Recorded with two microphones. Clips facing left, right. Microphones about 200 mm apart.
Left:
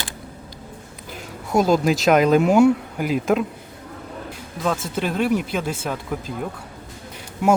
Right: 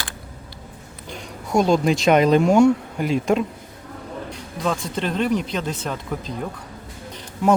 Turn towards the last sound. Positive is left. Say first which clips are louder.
# even
turn(degrees=10)  # may be behind; listen again after turning